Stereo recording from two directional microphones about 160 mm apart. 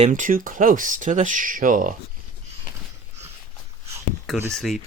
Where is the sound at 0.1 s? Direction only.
55° right (ahead or behind).